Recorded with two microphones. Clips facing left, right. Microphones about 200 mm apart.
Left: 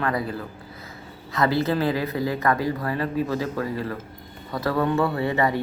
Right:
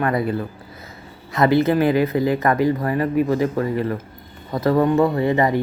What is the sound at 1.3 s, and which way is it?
Speech, 20° right (ahead or behind).